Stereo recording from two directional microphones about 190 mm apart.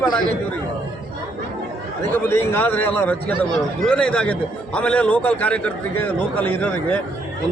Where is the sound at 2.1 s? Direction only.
10° left (ahead or behind).